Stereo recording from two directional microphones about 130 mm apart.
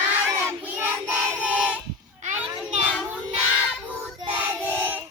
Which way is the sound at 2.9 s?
Centre (ahead or behind).